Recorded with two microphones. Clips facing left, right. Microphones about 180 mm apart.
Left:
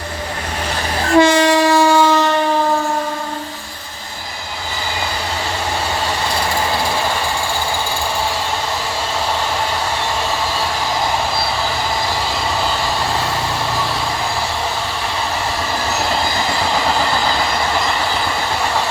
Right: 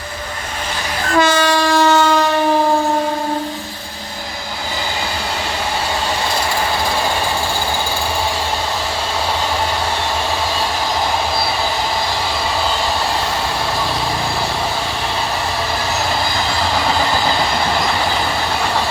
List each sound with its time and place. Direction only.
1.1 s train: 25° left (ahead or behind); by 2.2 s 5° left (ahead or behind)